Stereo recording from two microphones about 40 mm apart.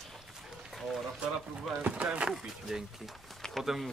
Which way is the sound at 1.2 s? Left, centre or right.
Right.